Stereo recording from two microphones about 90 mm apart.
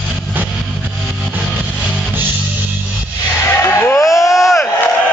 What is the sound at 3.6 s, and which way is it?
Music, 25° left (ahead or behind).